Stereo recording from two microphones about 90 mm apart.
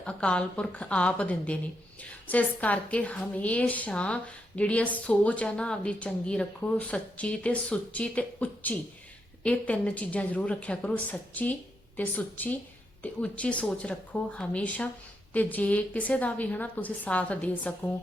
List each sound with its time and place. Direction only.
0.0 s a woman's voice: 10° left (ahead or behind)